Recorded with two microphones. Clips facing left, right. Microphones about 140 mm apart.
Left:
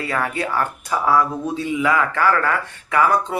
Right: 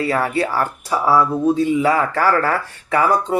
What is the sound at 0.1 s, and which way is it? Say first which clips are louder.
Speech: right 4 dB; 30° right (ahead or behind).